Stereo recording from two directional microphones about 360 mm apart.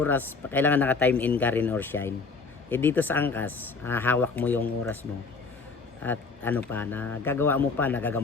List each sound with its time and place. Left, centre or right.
0.0 s speech: centre
6.0 s speech: centre